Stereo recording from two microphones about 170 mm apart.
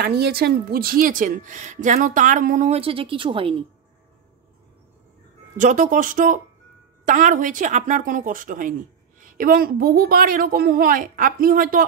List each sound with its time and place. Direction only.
0.0 s a woman's voice: 65° right (ahead or behind); by 3.6 s 30° right (ahead or behind)
5.6 s a woman's voice: 50° right (ahead or behind)